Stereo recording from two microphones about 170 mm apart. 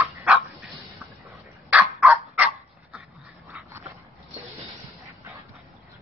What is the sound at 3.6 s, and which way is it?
Dog, 15° right (ahead or behind).